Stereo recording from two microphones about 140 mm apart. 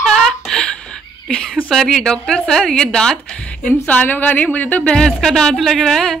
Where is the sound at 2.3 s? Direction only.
5° left (ahead or behind).